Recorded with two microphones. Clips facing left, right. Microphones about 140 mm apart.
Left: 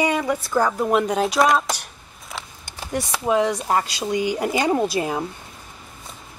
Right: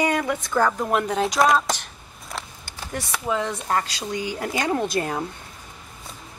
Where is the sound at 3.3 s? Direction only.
15° left (ahead or behind).